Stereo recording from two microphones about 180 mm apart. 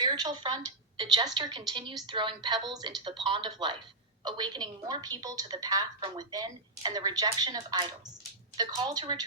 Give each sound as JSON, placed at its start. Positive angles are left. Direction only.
{"t": 0.0, "sound": "a woman's voice", "side_deg": -25}